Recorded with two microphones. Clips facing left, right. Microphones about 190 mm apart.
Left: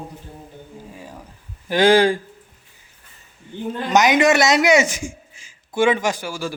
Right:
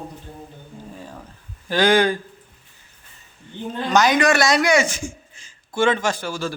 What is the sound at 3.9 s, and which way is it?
A man's voice, 20° left (ahead or behind).